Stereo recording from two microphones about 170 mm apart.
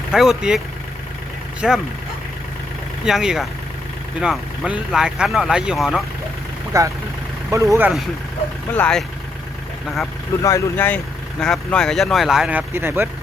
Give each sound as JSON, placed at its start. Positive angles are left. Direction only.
{"t": 0.1, "sound": "speech", "side_deg": -5}
{"t": 1.6, "sound": "speech", "side_deg": -5}
{"t": 3.0, "sound": "speech", "side_deg": -5}
{"t": 6.7, "sound": "speech", "side_deg": -15}
{"t": 8.7, "sound": "speech", "side_deg": 5}
{"t": 10.4, "sound": "speech", "side_deg": 15}